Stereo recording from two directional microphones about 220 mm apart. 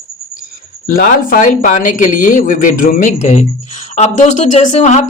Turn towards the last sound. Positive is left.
turn(degrees=30)  # may be behind; listen again after turning